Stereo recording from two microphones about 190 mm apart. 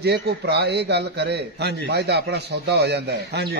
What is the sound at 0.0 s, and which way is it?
A man's voice, 60° right (ahead or behind).